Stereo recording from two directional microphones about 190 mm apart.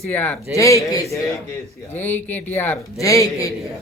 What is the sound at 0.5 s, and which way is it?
Speech, 15° left (ahead or behind).